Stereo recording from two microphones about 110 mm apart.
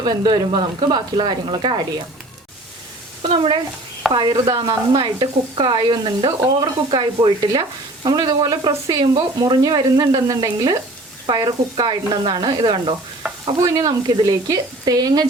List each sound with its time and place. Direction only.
0.0 s speech: 40° right (ahead or behind)
3.2 s speech: 55° right (ahead or behind)
4.1 s speech: 45° right (ahead or behind)
4.9 s sizzle: 50° right (ahead or behind)
6.6 s speech: 45° right (ahead or behind)
11.3 s sizzle: 45° right (ahead or behind)
13.6 s speech: 30° right (ahead or behind)